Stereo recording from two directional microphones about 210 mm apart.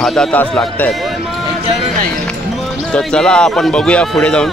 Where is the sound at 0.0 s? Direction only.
Centre (ahead or behind).